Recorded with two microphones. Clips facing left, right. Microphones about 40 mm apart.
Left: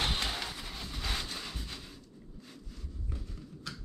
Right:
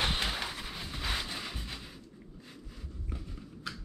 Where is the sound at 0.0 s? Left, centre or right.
Centre.